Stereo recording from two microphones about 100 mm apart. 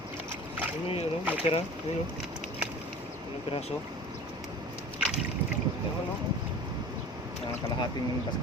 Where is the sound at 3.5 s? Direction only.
90° left.